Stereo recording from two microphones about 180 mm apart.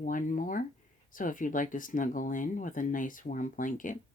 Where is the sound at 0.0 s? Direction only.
45° left (ahead or behind).